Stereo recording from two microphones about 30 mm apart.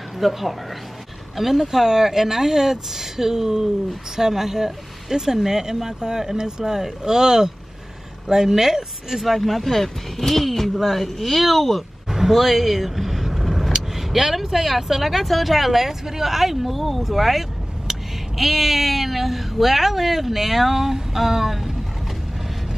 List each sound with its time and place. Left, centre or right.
0.2 s speech: centre
9.3 s speech: centre
12.1 s vehicle: centre
13.7 s speech: centre
17.1 s vehicle: centre
18.4 s speech: centre